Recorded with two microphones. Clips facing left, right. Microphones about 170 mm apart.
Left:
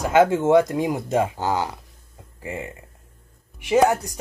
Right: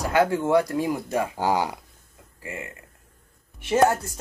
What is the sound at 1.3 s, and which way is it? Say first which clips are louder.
Speech: right 1 dB; 15° right (ahead or behind).